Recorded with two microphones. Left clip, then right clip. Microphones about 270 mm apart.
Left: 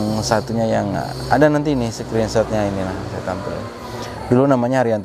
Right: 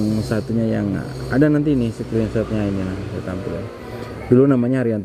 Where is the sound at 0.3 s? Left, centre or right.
Left.